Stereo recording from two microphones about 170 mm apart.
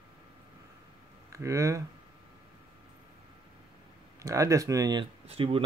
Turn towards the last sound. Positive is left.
turn(degrees=-35)  # may be behind; listen again after turning